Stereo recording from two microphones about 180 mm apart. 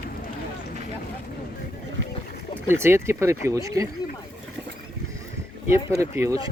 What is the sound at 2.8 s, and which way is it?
Speech, 15° right (ahead or behind).